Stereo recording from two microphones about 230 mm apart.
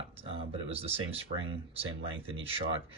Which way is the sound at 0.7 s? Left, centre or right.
Right.